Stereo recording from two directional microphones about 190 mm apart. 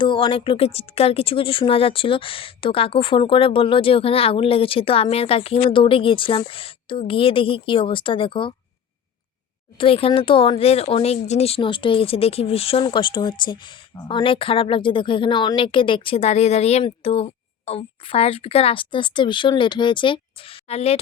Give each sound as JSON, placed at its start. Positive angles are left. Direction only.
{"t": 0.0, "sound": "speech", "side_deg": 25}
{"t": 9.7, "sound": "speech", "side_deg": 30}